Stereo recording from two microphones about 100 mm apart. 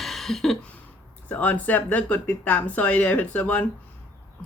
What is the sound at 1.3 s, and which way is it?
Speech, 15° left (ahead or behind).